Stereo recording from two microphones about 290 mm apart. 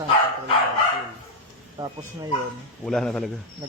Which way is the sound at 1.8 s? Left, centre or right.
Centre.